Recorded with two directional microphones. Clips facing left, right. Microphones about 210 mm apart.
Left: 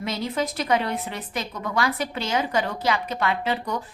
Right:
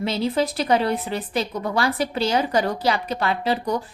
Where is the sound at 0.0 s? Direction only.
30° right (ahead or behind).